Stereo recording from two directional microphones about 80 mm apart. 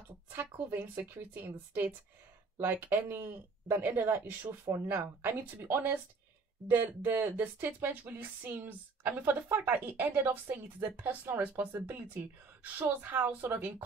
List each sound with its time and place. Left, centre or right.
0.6 s speech: right